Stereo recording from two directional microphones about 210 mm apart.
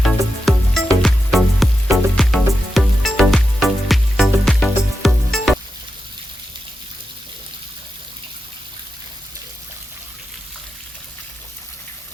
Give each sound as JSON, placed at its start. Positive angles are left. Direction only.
{"t": 0.0, "sound": "music", "side_deg": 0}